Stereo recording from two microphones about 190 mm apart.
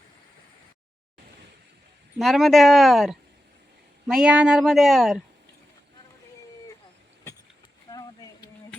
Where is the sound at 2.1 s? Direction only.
Centre (ahead or behind).